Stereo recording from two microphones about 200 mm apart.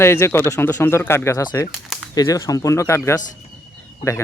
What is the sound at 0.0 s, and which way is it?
Speech, 15° left (ahead or behind).